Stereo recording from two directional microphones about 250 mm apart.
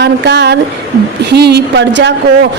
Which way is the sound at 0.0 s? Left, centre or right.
Right.